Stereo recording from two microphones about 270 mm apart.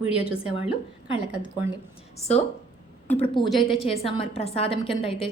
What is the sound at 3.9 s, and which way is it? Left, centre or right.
A woman's voice, left.